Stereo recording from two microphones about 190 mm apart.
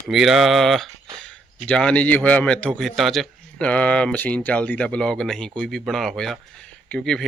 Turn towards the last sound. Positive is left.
turn(degrees=5)  # may be behind; listen again after turning